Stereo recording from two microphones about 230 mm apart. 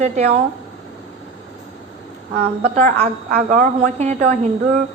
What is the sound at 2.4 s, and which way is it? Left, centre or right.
A woman's voice, right.